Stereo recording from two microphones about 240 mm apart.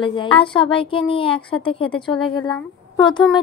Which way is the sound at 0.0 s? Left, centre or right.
Left.